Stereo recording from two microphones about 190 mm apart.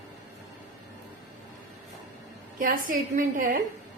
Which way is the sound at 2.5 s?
45° right (ahead or behind).